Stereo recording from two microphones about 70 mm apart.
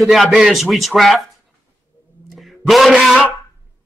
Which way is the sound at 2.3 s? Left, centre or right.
Centre.